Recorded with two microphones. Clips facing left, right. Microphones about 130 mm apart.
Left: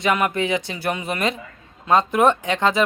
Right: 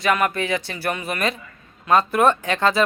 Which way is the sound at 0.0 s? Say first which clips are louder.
Even; 20° left (ahead or behind).